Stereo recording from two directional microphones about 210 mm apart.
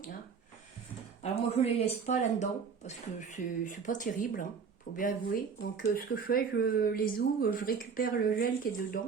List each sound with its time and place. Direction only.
1.2 s speech: 30° left (ahead or behind)